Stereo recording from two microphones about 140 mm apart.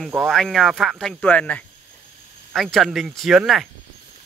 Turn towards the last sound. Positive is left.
turn(degrees=-5)  # may be behind; listen again after turning